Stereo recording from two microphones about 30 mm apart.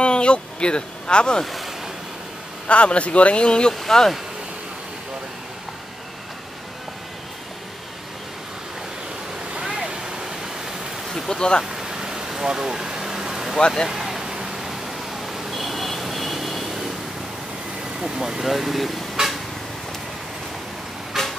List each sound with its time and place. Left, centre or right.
0.0 s speech: left
1.4 s speech: centre
2.7 s speech: left
3.8 s speech: centre
9.7 s waterfall: right
11.2 s speech: left
11.7 s vehicle: centre
12.4 s air conditioning: right
13.8 s a sound: centre
15.5 s vehicle: centre
18.0 s speech: right
18.4 s speech: centre
19.2 s a sound: right
21.2 s vehicle: centre